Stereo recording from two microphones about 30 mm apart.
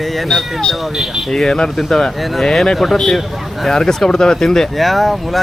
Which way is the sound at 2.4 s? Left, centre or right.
Centre.